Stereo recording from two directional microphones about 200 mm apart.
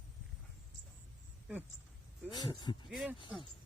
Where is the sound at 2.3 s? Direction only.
20° left (ahead or behind).